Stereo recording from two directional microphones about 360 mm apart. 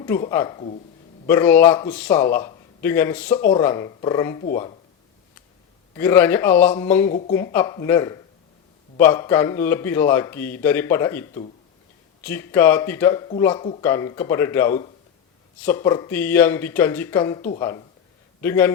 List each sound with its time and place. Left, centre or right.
0.0 s a man's voice: centre
5.9 s a man's voice: centre
7.1 s speech: centre
7.3 s a man's voice: centre